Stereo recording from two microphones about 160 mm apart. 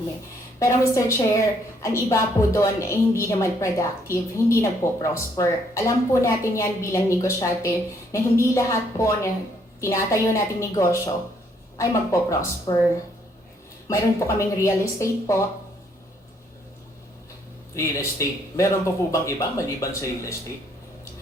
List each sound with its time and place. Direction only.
0.6 s a woman's voice: 20° left (ahead or behind)
13.8 s a woman's voice: 20° left (ahead or behind)
17.7 s a woman's voice: 20° left (ahead or behind)